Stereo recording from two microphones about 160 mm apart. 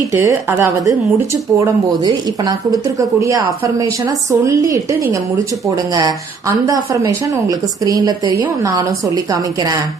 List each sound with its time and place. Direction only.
0.1 s speech: 15° right (ahead or behind)